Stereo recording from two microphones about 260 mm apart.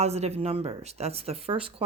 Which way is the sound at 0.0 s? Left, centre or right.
Right.